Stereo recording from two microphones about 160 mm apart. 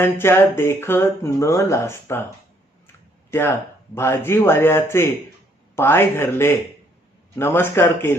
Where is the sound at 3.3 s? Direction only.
15° left (ahead or behind).